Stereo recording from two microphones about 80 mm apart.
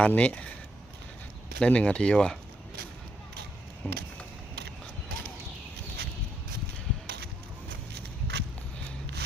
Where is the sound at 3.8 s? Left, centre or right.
Centre.